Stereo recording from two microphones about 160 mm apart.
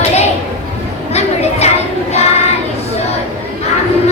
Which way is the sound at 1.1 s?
40° left (ahead or behind).